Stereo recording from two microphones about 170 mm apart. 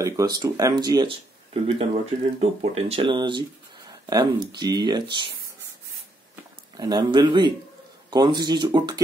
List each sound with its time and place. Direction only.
0.0 s speech: 20° right (ahead or behind)
1.5 s speech: 35° right (ahead or behind)
6.8 s speech: 25° right (ahead or behind)